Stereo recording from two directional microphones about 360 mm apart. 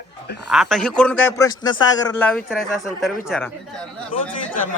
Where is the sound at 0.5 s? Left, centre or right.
Centre.